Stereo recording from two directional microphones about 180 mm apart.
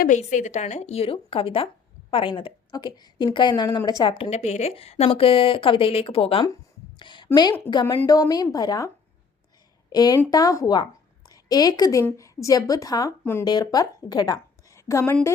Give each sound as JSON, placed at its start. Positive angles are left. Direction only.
{"t": 0.0, "sound": "a woman's voice", "side_deg": 45}
{"t": 7.0, "sound": "a sound", "side_deg": 25}
{"t": 7.6, "sound": "a woman's voice", "side_deg": 25}
{"t": 9.9, "sound": "a woman's voice", "side_deg": 20}